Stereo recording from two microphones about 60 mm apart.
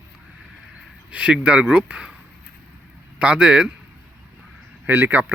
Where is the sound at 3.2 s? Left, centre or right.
Centre.